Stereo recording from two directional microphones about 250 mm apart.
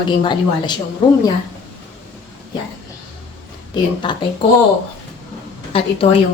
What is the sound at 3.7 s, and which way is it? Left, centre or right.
Speech, centre.